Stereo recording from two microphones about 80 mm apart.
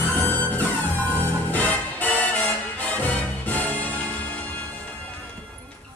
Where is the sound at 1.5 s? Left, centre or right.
Centre.